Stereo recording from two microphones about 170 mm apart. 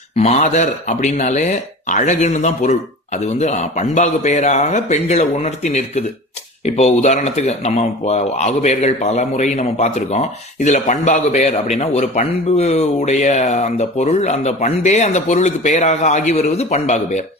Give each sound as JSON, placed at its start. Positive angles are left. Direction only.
{"t": 0.2, "sound": "speech", "side_deg": 45}